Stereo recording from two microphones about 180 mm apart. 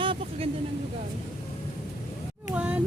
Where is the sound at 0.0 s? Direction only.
30° right (ahead or behind).